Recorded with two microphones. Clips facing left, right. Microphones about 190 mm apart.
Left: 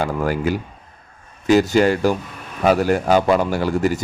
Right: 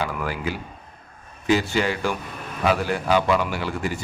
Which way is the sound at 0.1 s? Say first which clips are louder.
Left 8 dB; 45° left (ahead or behind).